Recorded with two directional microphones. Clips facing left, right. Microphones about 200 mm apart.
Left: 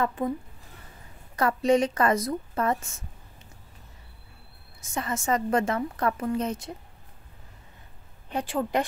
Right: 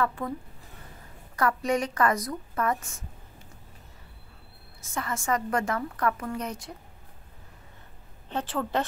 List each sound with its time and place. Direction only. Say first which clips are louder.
0.0 s a woman's voice: left 2 dB; 20° left (ahead or behind)
1.3 s a woman's voice: left 4 dB; 25° left (ahead or behind)
4.8 s a woman's voice: left 2 dB; 20° left (ahead or behind)
8.3 s a woman's voice: left 2 dB; 10° left (ahead or behind)